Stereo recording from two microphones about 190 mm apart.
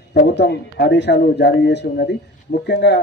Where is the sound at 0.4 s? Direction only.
60° left (ahead or behind).